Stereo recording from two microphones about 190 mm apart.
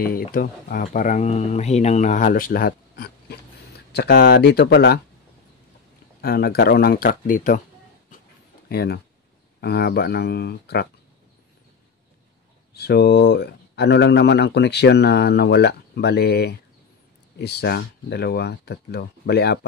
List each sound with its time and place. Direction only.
0.0 s speech: 50° left (ahead or behind)
6.2 s speech: 55° left (ahead or behind)
8.1 s a sound: 45° left (ahead or behind)
8.6 s speech: 55° left (ahead or behind)
12.7 s speech: 60° left (ahead or behind)